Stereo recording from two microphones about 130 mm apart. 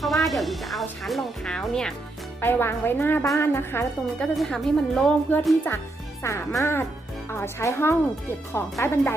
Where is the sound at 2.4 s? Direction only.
15° left (ahead or behind).